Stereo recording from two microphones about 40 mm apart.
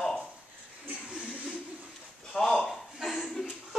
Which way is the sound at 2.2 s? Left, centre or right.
Centre.